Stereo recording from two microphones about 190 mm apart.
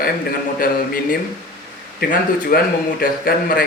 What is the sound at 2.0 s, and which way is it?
Speech, 50° left (ahead or behind).